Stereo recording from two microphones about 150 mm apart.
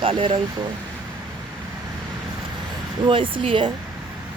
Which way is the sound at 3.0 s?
35° right (ahead or behind).